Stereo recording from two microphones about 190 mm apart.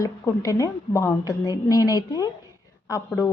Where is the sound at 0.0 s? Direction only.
15° left (ahead or behind).